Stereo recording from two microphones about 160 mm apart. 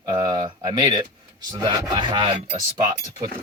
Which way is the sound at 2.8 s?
25° right (ahead or behind).